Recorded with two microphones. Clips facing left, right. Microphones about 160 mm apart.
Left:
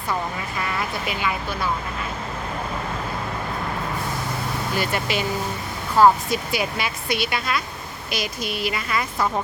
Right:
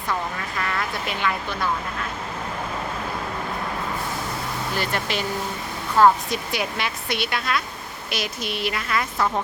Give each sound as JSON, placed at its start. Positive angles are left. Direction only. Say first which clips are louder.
{"t": 0.6, "sound": "speech", "louder": "even", "side_deg": 5}
{"t": 4.8, "sound": "speech", "louder": "left 2 dB", "side_deg": 10}